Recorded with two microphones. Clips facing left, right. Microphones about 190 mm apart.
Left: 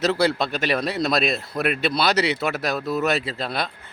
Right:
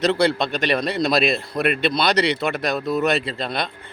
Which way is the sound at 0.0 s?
5° left (ahead or behind).